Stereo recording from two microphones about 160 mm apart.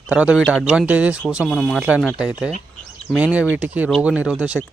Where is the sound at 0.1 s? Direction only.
10° right (ahead or behind).